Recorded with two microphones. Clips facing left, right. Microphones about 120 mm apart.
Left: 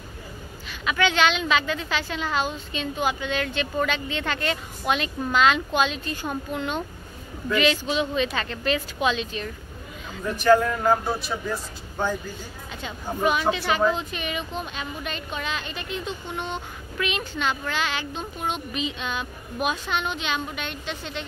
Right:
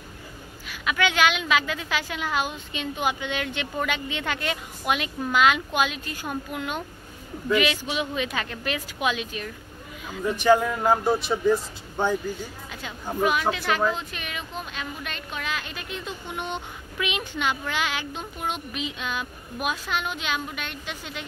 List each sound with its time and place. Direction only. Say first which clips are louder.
0.7 s a woman's voice: left 1 dB; 10° right (ahead or behind)
12.8 s speech: even; 5° right (ahead or behind)
16.4 s speech: even; 15° right (ahead or behind)